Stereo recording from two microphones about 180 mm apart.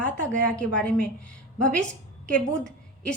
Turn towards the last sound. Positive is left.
turn(degrees=5)  # may be behind; listen again after turning